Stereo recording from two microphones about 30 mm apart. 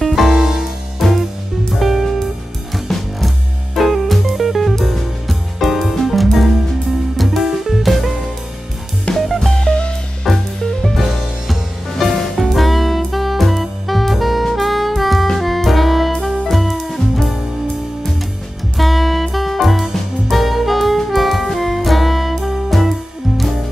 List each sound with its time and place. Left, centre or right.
0.0 s music: centre
0.4 s music: centre
1.7 s music: centre
9.2 s music: centre
9.5 s music: left
10.3 s music: centre
12.0 s music: centre
12.4 s music: centre
18.8 s music: centre